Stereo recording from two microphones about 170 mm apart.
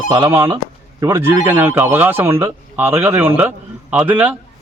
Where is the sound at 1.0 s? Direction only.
15° right (ahead or behind).